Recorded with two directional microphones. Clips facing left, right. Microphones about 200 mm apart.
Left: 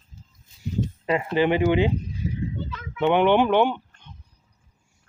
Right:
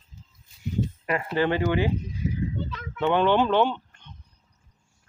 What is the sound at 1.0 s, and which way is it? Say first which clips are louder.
Speech: left 4 dB; 20° left (ahead or behind).